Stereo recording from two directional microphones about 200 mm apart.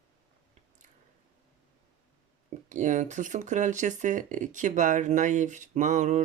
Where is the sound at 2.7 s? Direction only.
35° right (ahead or behind).